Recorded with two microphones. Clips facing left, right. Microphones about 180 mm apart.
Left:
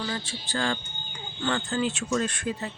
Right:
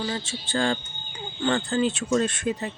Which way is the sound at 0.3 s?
30° right (ahead or behind).